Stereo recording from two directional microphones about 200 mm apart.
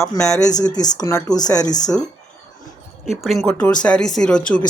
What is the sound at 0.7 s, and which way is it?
Speech, 20° left (ahead or behind).